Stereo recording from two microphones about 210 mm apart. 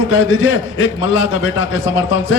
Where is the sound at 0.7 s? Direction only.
65° left (ahead or behind).